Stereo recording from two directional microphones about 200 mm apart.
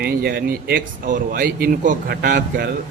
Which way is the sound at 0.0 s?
50° right (ahead or behind).